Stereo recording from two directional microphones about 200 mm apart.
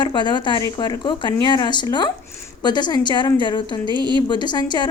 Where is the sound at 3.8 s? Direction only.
20° right (ahead or behind).